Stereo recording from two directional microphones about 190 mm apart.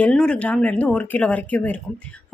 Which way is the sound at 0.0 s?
5° left (ahead or behind).